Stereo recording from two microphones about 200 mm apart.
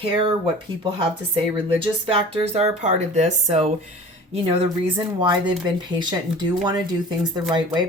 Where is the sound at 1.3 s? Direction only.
25° right (ahead or behind).